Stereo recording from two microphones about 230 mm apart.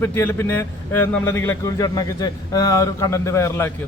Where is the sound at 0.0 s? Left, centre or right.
Centre.